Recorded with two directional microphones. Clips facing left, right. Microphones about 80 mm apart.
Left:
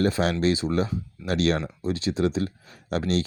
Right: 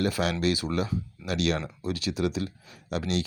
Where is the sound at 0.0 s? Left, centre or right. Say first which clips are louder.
Left 4 dB; left.